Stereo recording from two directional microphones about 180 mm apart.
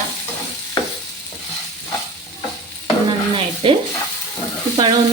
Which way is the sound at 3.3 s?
30° right (ahead or behind).